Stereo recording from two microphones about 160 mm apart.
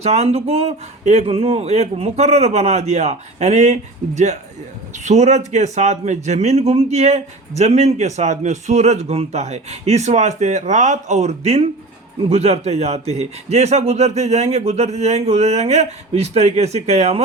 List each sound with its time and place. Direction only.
0.0 s speech: 40° right (ahead or behind)